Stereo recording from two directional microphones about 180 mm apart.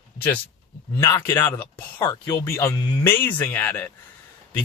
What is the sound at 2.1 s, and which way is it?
Speech, 25° left (ahead or behind).